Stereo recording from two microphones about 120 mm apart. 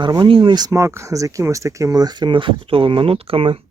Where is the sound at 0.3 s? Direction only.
45° right (ahead or behind).